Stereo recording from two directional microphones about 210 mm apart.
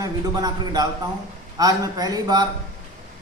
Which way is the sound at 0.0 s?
20° right (ahead or behind).